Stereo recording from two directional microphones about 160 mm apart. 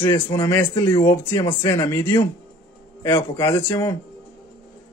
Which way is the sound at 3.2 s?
20° left (ahead or behind).